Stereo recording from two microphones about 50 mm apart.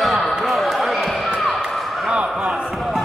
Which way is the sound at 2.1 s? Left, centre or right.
Right.